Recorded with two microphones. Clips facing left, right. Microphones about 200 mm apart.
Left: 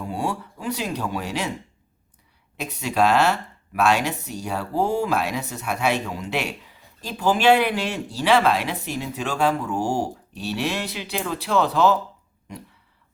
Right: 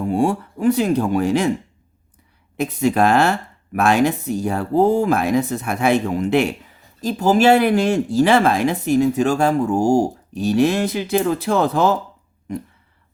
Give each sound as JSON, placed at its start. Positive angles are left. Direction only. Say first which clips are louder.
{"t": 0.1, "sound": "speech", "louder": "right 9 dB", "side_deg": -50}
{"t": 2.6, "sound": "speech", "louder": "right 5 dB", "side_deg": -50}